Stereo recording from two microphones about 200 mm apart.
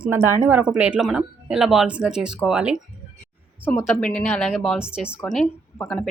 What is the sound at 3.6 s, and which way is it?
Speech, 10° left (ahead or behind).